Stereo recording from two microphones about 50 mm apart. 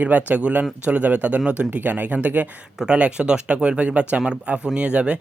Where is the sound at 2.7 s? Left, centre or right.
Centre.